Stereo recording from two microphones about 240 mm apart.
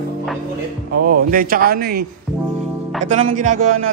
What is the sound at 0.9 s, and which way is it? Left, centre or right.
Speech, right.